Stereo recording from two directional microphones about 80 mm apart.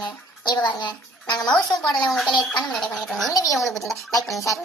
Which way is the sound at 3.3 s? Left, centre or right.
Left.